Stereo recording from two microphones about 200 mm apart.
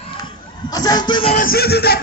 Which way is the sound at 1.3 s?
45° left (ahead or behind).